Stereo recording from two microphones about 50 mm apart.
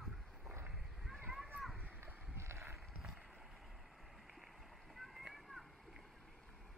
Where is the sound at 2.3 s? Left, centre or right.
Right.